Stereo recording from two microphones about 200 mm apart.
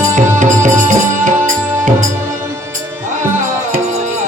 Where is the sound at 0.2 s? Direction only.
40° right (ahead or behind).